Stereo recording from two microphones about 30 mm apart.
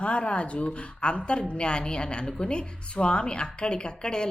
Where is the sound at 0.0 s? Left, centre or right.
Left.